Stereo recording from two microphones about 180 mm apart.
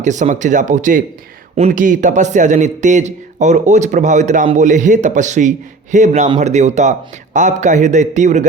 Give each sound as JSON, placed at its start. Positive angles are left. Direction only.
{"t": 0.0, "sound": "a man's voice", "side_deg": -40}